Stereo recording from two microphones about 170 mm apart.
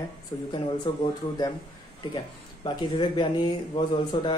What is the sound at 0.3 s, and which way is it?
Speech, 20° left (ahead or behind).